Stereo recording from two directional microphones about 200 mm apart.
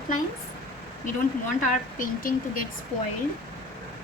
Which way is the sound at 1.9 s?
45° left (ahead or behind).